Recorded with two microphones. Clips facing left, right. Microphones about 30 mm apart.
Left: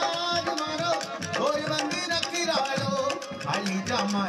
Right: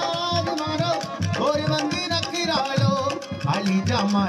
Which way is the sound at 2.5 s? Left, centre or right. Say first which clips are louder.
Right 5 dB; right.